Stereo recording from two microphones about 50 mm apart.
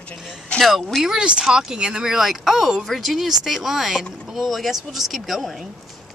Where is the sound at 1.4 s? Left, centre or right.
Centre.